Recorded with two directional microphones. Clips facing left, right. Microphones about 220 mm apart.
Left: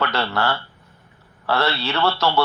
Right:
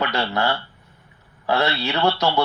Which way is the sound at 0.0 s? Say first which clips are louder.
Even; 20° right (ahead or behind).